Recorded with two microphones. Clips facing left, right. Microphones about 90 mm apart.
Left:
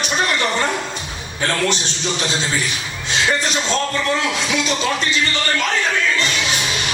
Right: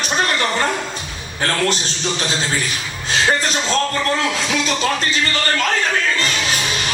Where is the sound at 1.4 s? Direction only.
40° right (ahead or behind).